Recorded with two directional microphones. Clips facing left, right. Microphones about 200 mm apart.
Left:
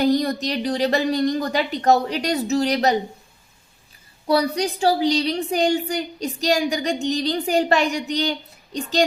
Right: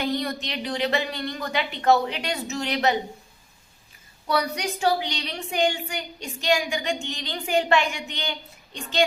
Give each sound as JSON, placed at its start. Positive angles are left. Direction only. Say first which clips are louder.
{"t": 0.0, "sound": "a woman's voice", "louder": "left 8 dB", "side_deg": 40}
{"t": 4.3, "sound": "a woman's voice", "louder": "left 6 dB", "side_deg": 30}